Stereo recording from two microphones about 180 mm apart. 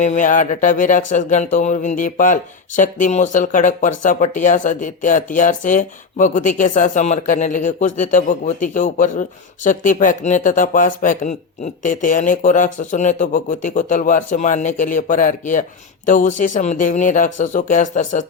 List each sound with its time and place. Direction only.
0.0 s speech: 45° left (ahead or behind)